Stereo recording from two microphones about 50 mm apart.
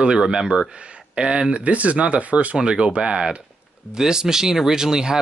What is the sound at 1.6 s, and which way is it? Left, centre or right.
Speech, right.